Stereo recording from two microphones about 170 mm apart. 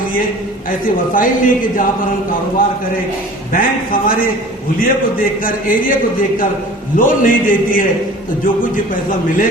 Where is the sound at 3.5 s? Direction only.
55° left (ahead or behind).